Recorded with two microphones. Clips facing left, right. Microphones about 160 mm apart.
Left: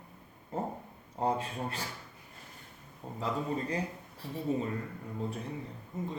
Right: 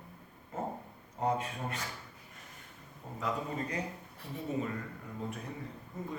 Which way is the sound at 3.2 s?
30° left (ahead or behind).